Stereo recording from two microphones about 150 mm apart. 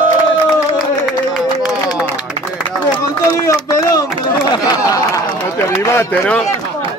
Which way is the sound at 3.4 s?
20° left (ahead or behind).